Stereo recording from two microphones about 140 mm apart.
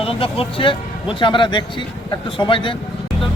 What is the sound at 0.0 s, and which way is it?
A man's voice, 40° left (ahead or behind).